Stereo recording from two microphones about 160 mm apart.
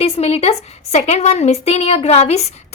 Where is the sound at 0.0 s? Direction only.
40° left (ahead or behind).